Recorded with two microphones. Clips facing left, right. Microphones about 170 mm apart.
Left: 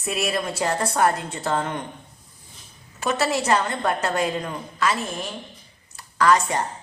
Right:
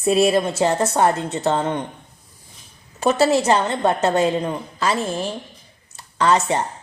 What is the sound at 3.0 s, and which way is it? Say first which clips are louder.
A woman's voice: right 7 dB; 30° right (ahead or behind).